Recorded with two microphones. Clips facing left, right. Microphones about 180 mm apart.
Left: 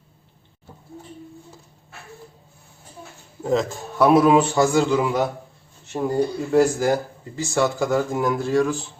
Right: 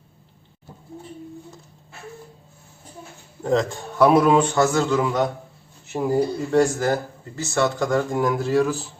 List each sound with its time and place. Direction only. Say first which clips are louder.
3.4 s a man's voice: right 1 dB; centre (ahead or behind)
5.9 s speech: right 1 dB; 5° right (ahead or behind)
6.6 s a man's voice: left 2 dB; 10° left (ahead or behind)